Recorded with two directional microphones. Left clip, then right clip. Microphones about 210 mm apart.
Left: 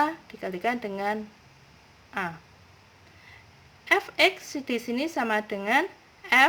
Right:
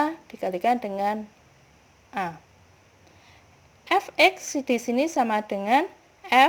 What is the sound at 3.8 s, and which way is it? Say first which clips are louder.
A woman's voice: right 2 dB; 20° right (ahead or behind).